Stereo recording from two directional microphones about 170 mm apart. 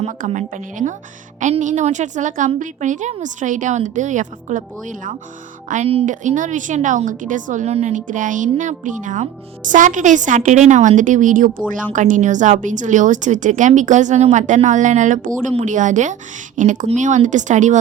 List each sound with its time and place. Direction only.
0.0 s a woman's voice: 40° right (ahead or behind)